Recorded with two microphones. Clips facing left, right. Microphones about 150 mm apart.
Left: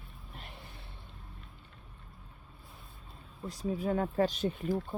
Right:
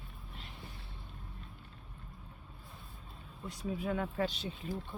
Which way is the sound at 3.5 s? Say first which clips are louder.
Left 4 dB; 35° left (ahead or behind).